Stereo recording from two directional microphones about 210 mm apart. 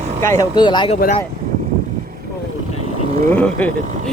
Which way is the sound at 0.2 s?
15° left (ahead or behind).